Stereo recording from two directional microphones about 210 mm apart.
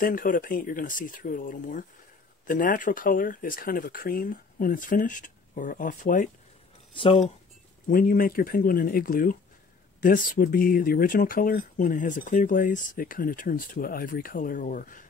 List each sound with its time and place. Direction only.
0.0 s speech: 40° left (ahead or behind)
6.9 s speech: 25° left (ahead or behind)
7.9 s speech: 45° left (ahead or behind)